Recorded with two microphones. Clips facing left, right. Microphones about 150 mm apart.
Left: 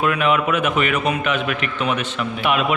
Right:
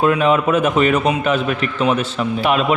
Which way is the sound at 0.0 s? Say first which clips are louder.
Right 4 dB; 30° right (ahead or behind).